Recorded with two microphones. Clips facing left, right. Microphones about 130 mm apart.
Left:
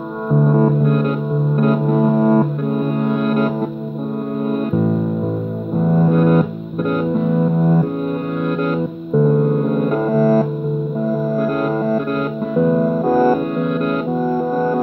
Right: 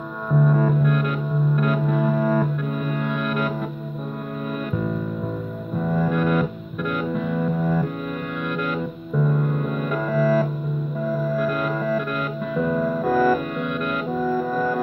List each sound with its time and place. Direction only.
0.3 s music: 35° left (ahead or behind)
5.8 s music: 35° left (ahead or behind)
9.2 s music: 40° left (ahead or behind)